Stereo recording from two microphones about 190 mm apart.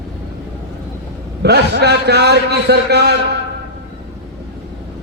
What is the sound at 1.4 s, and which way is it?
A man's voice, 60° right (ahead or behind).